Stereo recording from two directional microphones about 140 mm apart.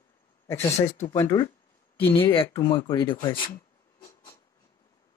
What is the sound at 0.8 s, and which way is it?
Speech, 55° left (ahead or behind).